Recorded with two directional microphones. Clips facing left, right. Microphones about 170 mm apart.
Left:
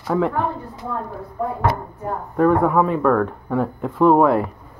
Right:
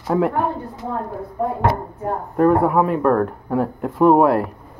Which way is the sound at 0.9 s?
20° right (ahead or behind).